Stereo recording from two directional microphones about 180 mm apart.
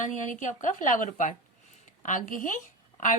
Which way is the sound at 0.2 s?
45° left (ahead or behind).